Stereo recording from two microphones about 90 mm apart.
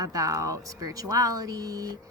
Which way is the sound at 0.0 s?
40° right (ahead or behind).